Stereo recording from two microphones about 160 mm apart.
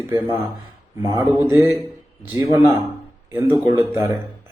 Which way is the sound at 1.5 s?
15° right (ahead or behind).